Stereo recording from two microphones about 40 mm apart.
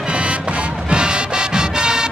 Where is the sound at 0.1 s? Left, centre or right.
Right.